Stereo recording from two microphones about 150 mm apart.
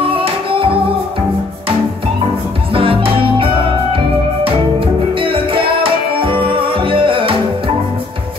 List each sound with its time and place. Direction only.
0.0 s music: 35° right (ahead or behind)
2.7 s music: 35° right (ahead or behind)